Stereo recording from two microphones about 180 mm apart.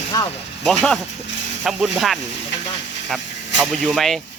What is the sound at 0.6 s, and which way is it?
Speech, 5° left (ahead or behind).